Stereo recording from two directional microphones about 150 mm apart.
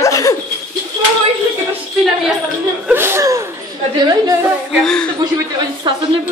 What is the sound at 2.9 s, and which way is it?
Chuckle, 15° right (ahead or behind).